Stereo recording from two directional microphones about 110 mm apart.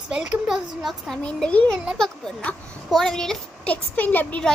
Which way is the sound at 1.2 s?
10° left (ahead or behind).